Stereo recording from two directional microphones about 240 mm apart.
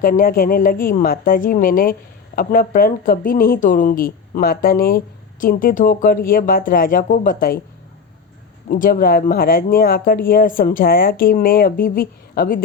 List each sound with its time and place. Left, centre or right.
0.0 s a woman's voice: left
8.7 s a woman's voice: left